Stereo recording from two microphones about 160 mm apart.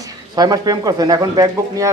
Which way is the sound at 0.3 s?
25° right (ahead or behind).